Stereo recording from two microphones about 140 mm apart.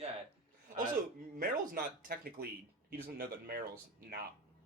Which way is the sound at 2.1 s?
90° right.